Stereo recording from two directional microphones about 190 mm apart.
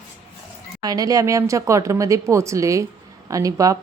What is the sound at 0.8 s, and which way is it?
A woman's voice, 20° right (ahead or behind).